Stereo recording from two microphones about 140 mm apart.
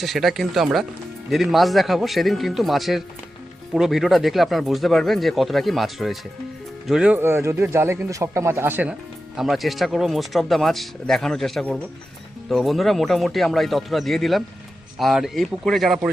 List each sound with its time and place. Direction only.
0.0 s speech: centre (ahead or behind)